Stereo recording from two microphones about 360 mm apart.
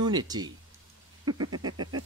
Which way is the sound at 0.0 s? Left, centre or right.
Centre.